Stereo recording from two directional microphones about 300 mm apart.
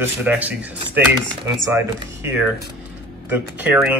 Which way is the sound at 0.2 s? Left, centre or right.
Centre.